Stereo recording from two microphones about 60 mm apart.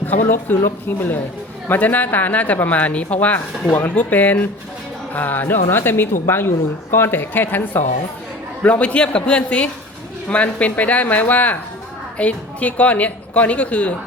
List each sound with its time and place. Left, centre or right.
0.3 s speech: left
8.6 s speech: left